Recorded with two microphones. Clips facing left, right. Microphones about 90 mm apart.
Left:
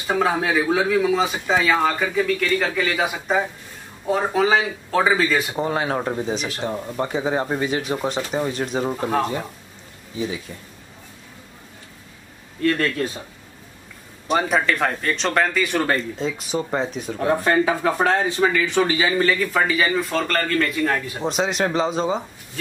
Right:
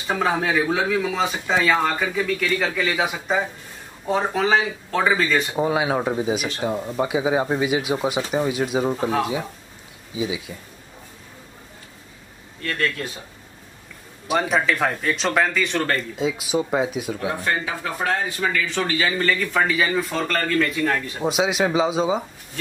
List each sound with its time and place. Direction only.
0.0 s speech: 5° left (ahead or behind)
5.6 s speech: 10° right (ahead or behind)
14.2 s speech: 5° right (ahead or behind)
16.2 s speech: 5° right (ahead or behind)
17.3 s speech: 40° left (ahead or behind)
18.0 s speech: 25° left (ahead or behind); by 22.2 s 5° right (ahead or behind)